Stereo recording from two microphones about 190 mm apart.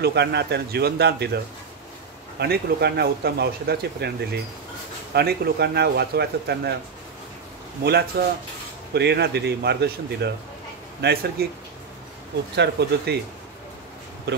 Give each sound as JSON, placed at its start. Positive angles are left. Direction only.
{"t": 0.0, "sound": "speech", "side_deg": -60}
{"t": 5.1, "sound": "speech", "side_deg": -60}
{"t": 8.2, "sound": "speech", "side_deg": -60}
{"t": 12.5, "sound": "speech", "side_deg": -60}